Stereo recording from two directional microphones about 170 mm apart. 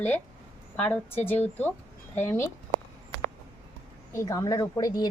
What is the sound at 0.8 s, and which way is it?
A woman's voice, 10° left (ahead or behind).